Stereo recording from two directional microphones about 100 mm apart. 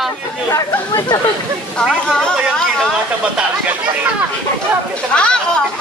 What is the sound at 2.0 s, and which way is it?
Speech, 5° left (ahead or behind).